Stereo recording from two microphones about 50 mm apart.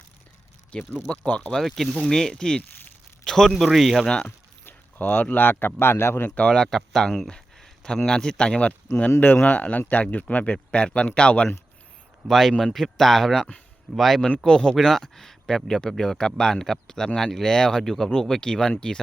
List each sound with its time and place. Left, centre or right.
0.7 s speech: centre
1.6 s speech: centre
3.5 s speech: centre
4.6 s speech: left
6.3 s speech: centre
9.2 s speech: left
12.3 s speech: centre
14.4 s speech: centre